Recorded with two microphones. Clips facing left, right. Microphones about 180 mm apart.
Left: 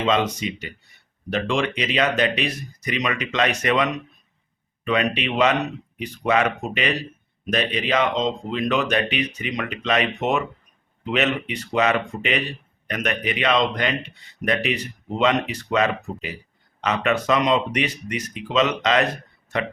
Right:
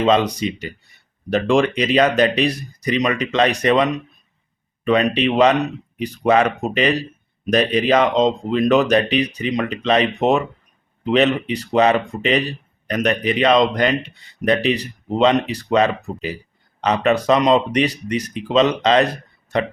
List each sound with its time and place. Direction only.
0.0 s speech: 35° right (ahead or behind)
4.9 s speech: 35° right (ahead or behind)